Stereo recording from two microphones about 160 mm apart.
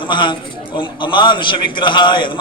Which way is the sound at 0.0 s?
30° left (ahead or behind).